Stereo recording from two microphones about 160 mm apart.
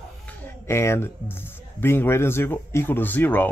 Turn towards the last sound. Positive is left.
turn(degrees=10)  # may be behind; listen again after turning